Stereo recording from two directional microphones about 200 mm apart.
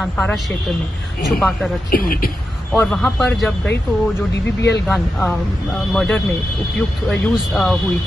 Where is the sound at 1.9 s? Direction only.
45° left (ahead or behind).